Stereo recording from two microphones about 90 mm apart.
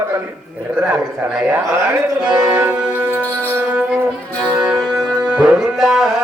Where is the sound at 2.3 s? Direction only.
15° right (ahead or behind).